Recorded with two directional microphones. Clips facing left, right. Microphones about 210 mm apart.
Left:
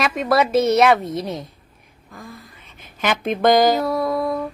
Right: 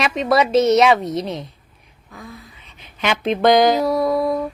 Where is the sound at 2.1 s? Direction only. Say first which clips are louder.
Right 1 dB; centre (ahead or behind).